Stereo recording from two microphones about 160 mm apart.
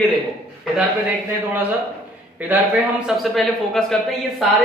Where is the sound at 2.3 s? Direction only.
10° right (ahead or behind).